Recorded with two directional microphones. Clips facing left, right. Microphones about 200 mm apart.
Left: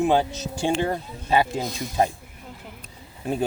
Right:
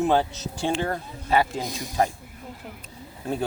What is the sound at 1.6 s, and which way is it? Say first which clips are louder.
Speech: left 2 dB; 15° right (ahead or behind).